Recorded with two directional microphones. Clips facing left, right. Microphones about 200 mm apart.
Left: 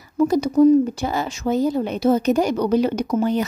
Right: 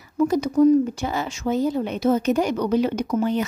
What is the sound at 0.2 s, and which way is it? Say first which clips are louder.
Speech: left 2 dB; 35° left (ahead or behind).